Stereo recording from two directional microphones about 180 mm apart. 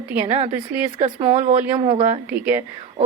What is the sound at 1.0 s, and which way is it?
Speech, 40° right (ahead or behind).